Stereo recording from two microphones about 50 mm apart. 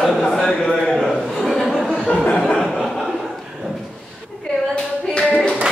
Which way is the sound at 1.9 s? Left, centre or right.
Left.